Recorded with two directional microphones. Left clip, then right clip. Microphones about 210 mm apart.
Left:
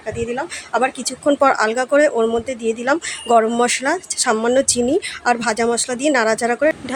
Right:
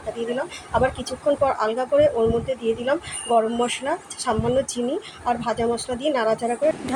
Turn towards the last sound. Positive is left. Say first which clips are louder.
# left 5 dB
turn(degrees=55)  # may be behind; listen again after turning